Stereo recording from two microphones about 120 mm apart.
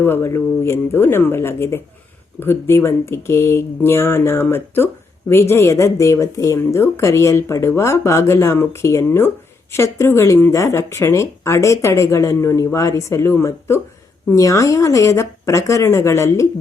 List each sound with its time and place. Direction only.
0.0 s speech: 20° left (ahead or behind)